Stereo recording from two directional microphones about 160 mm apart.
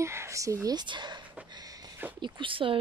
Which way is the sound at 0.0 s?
15° right (ahead or behind).